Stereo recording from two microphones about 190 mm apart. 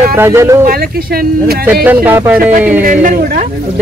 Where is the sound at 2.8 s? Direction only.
45° right (ahead or behind).